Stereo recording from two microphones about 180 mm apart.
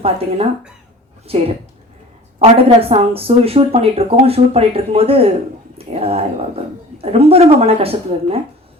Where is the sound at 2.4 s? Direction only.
35° right (ahead or behind).